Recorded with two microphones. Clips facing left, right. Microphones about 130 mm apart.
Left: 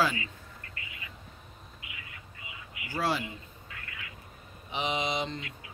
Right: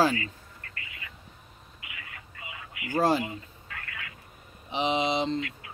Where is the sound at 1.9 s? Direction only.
70° right (ahead or behind).